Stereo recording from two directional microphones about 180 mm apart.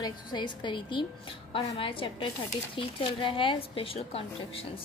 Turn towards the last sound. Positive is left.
turn(degrees=30)  # may be behind; listen again after turning